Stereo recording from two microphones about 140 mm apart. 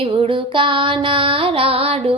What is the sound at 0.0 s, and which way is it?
Music, 40° right (ahead or behind).